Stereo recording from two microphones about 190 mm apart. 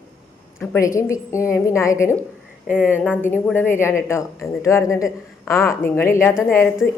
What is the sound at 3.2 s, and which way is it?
A woman's voice, 10° left (ahead or behind).